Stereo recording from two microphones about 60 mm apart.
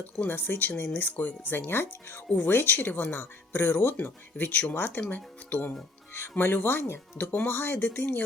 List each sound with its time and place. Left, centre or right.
0.3 s speech: left